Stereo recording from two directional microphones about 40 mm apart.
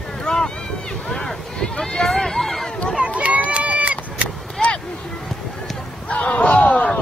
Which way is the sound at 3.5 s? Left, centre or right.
Right.